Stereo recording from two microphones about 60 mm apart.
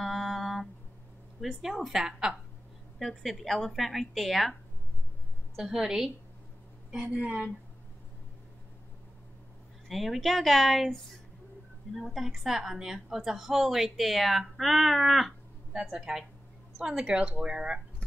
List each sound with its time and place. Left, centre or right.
0.0 s music: centre
1.4 s speech: centre
3.0 s a woman's voice: centre
5.6 s a woman's voice: centre
7.2 s speech: right
9.8 s a woman's voice: centre